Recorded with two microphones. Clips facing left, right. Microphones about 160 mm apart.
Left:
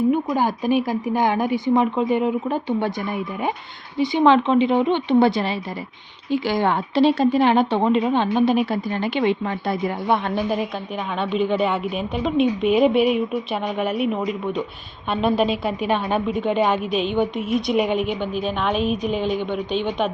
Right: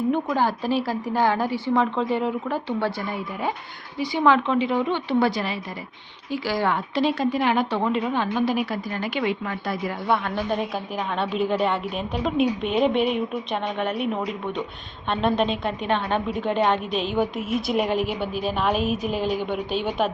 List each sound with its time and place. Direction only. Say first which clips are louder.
0.3 s a woman's voice: left 3 dB; 15° left (ahead or behind)
3.9 s a woman's voice: left 4 dB; 25° left (ahead or behind)
11.2 s a woman's voice: left 3 dB; centre (ahead or behind)
15.1 s a woman's voice: left 3 dB; 5° left (ahead or behind)